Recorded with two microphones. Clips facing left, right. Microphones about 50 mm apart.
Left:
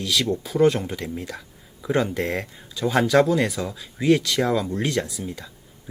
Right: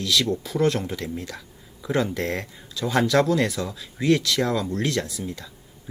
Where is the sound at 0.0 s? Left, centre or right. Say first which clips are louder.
Even; centre.